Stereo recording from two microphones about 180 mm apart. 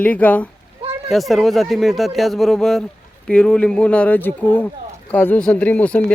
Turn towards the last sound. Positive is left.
turn(degrees=5)  # may be behind; listen again after turning